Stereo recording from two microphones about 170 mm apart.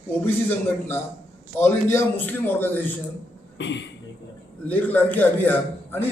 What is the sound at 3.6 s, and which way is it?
Speech, 90° left.